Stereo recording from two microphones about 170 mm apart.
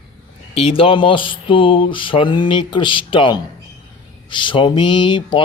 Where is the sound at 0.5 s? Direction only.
35° left (ahead or behind).